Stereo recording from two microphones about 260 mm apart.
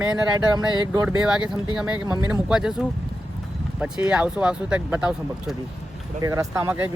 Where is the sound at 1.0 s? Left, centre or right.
Centre.